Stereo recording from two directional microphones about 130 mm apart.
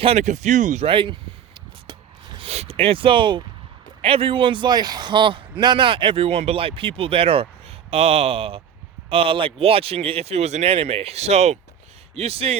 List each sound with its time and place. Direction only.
0.0 s a man's voice: 50° right (ahead or behind)
0.3 s speech: 65° right (ahead or behind)
0.9 s a sound: 40° right (ahead or behind)
2.5 s a man's voice: 50° right (ahead or behind)